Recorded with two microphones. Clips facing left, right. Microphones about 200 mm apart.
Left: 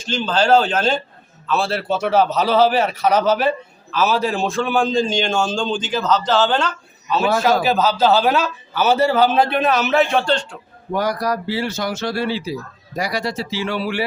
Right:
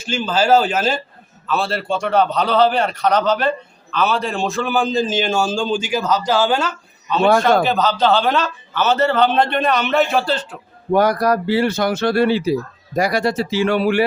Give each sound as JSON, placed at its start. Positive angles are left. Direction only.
{"t": 0.0, "sound": "a man's voice", "side_deg": -10}
{"t": 7.6, "sound": "a man's voice", "side_deg": 5}
{"t": 10.9, "sound": "speech", "side_deg": -55}